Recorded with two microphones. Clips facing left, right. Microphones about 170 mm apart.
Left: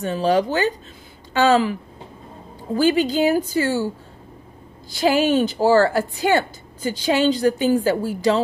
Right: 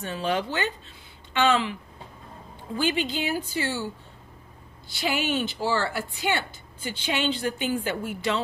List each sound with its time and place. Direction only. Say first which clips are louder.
0.0 s speech: left 9 dB; 35° left (ahead or behind)